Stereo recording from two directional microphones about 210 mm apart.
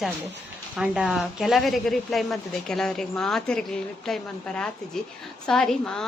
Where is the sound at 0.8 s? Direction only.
Centre (ahead or behind).